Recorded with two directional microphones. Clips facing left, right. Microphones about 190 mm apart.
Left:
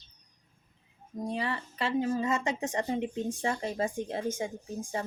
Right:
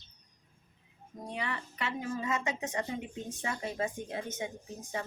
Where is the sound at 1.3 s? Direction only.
30° left (ahead or behind).